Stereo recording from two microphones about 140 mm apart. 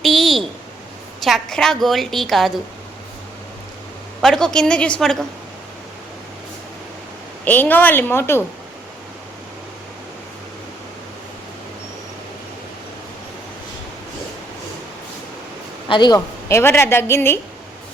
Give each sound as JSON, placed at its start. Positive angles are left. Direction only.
{"t": 0.0, "sound": "a sound", "side_deg": 0}
{"t": 1.2, "sound": "a woman's voice", "side_deg": 0}
{"t": 4.2, "sound": "a woman's voice", "side_deg": 5}
{"t": 7.4, "sound": "a woman's voice", "side_deg": 15}
{"t": 15.9, "sound": "a man's voice", "side_deg": 30}
{"t": 16.5, "sound": "a woman's voice", "side_deg": 20}